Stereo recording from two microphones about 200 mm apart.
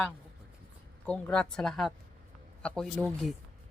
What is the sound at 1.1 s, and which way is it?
Speech, 5° left (ahead or behind).